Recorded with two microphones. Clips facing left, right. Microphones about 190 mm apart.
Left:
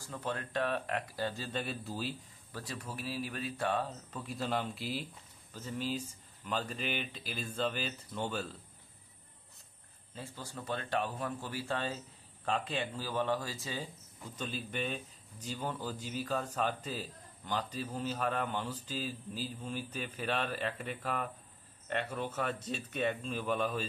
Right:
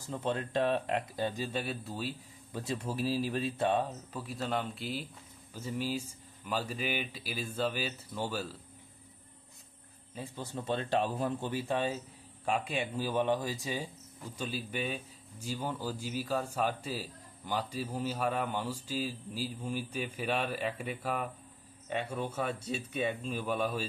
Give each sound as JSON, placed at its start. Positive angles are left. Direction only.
{"t": 0.0, "sound": "speech", "side_deg": -25}
{"t": 2.5, "sound": "speech", "side_deg": -25}
{"t": 4.1, "sound": "speech", "side_deg": 0}
{"t": 5.5, "sound": "speech", "side_deg": -10}
{"t": 10.1, "sound": "speech", "side_deg": -20}